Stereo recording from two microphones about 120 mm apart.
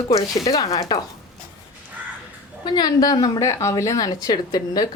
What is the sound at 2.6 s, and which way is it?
Speech, 40° left (ahead or behind).